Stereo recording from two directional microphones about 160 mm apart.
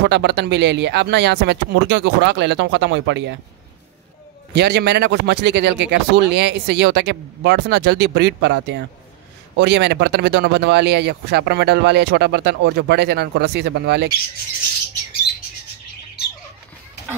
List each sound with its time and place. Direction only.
0.0 s speech: 90° right
4.6 s speech: 90° right